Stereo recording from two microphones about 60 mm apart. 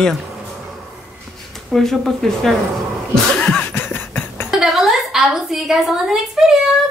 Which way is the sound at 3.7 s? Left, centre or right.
Left.